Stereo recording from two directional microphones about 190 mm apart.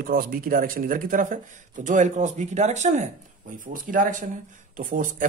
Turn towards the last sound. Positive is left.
turn(degrees=-45)  # may be behind; listen again after turning